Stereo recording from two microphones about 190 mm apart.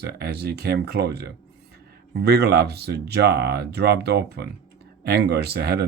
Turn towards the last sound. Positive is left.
turn(degrees=-55)  # may be behind; listen again after turning